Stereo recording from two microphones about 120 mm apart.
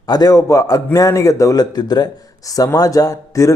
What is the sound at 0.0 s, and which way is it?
A man's voice, 35° left (ahead or behind).